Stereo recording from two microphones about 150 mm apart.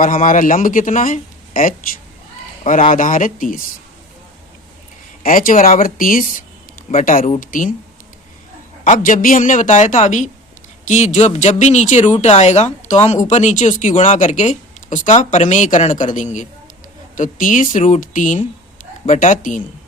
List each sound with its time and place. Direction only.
0.0 s speech: 65° left (ahead or behind)
2.9 s speech: 60° left (ahead or behind)
5.2 s speech: 70° left (ahead or behind)
8.8 s speech: 65° left (ahead or behind)